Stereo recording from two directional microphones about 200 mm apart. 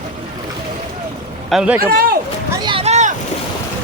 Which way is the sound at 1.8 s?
50° right (ahead or behind).